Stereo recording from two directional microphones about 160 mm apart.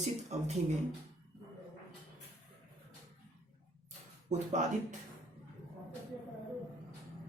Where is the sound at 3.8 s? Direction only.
50° right (ahead or behind).